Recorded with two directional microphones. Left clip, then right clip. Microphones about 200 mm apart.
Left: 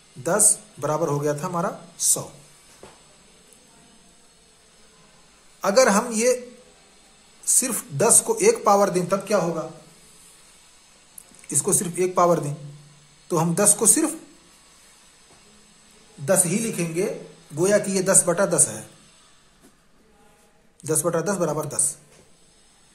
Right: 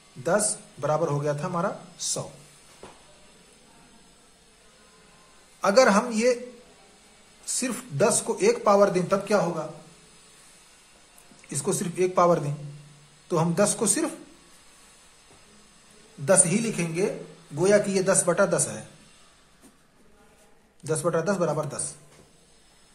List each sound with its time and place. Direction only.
0.2 s speech: 20° left (ahead or behind)
5.6 s a man's voice: 15° left (ahead or behind)
7.4 s speech: 20° left (ahead or behind)
11.4 s a man's voice: 15° left (ahead or behind)
16.3 s a woman's voice: 5° left (ahead or behind)
20.8 s a man's voice: 20° left (ahead or behind)